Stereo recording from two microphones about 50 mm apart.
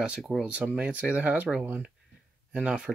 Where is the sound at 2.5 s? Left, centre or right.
Centre.